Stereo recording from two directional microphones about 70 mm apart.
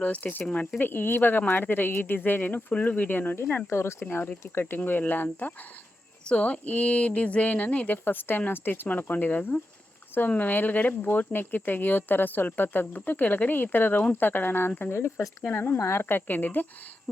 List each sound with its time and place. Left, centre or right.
0.0 s speech: left
3.3 s speech: left